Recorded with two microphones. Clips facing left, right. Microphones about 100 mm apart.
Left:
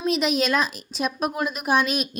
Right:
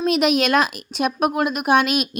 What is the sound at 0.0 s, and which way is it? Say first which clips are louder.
Speech: right 4 dB; 65° right (ahead or behind).